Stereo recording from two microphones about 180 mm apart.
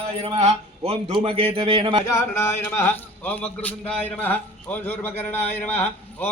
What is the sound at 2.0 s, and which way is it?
A man's voice, 15° left (ahead or behind).